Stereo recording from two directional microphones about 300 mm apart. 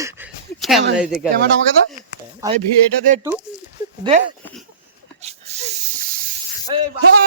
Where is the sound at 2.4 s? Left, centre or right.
Centre.